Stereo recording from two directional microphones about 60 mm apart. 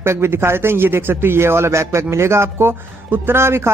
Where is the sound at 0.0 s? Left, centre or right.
Right.